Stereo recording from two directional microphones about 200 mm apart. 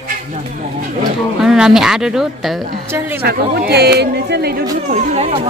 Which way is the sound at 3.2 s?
50° right (ahead or behind).